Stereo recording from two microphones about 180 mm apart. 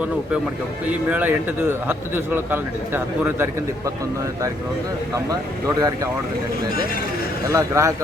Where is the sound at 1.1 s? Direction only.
10° right (ahead or behind).